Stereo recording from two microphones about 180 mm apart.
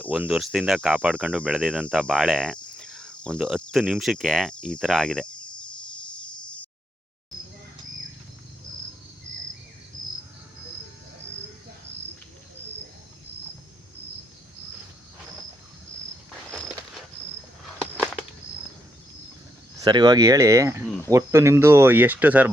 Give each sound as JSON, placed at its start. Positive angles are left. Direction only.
{"t": 0.1, "sound": "speech", "side_deg": -5}
{"t": 19.8, "sound": "speech", "side_deg": -25}